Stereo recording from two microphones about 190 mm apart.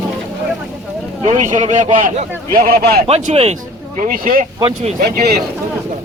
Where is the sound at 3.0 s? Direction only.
35° right (ahead or behind).